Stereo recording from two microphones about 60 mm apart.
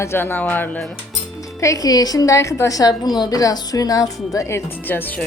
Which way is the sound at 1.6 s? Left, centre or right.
Left.